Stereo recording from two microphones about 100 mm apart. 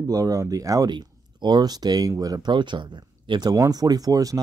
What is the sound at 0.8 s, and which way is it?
Speech, 50° right (ahead or behind).